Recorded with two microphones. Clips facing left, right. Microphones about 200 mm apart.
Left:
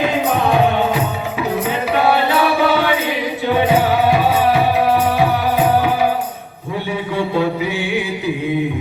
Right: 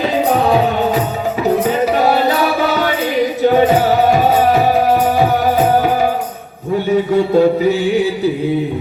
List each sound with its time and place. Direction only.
1.8 s music: 40° right (ahead or behind)
6.9 s music: 45° right (ahead or behind)